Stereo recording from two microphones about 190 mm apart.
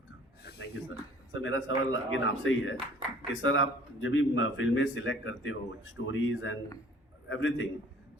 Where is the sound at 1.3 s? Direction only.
80° left.